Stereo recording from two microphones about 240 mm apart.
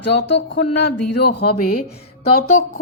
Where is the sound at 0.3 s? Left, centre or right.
Left.